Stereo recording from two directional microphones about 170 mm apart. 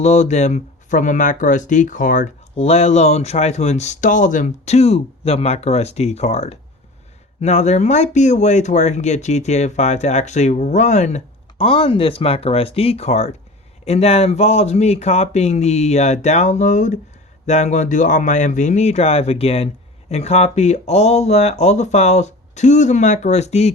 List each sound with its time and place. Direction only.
0.0 s speech: 40° left (ahead or behind)